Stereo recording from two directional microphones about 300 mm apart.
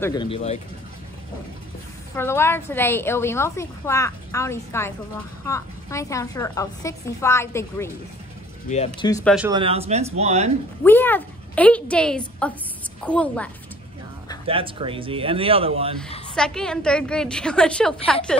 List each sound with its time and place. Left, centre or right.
0.0 s a woman's voice: centre
2.1 s a woman's voice: centre
8.6 s a woman's voice: left
9.2 s a woman's voice: centre
9.5 s speech: centre
10.8 s a woman's voice: centre
14.4 s speech: centre
16.3 s a woman's voice: centre